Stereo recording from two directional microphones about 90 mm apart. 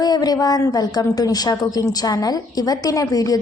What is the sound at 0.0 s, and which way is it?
A woman's voice, 50° left (ahead or behind).